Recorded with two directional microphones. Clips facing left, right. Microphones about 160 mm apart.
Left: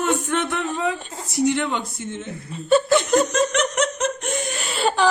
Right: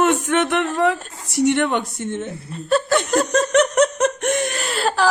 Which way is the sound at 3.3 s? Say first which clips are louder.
Right 4 dB; 50° right (ahead or behind).